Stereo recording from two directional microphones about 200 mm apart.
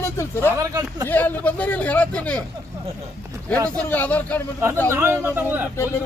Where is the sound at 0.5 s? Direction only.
15° right (ahead or behind).